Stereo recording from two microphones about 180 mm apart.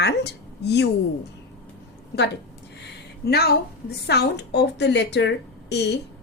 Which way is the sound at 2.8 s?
60° left (ahead or behind).